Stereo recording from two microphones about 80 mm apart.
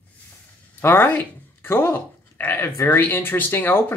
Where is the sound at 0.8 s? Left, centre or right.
Left.